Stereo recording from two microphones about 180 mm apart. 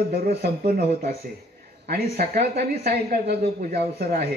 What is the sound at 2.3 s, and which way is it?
Speech, 60° right (ahead or behind).